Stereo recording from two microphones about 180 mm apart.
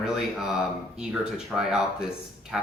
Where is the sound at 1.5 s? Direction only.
5° right (ahead or behind).